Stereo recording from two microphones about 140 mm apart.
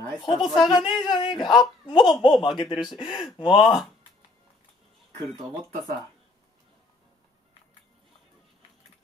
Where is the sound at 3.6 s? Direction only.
Centre (ahead or behind).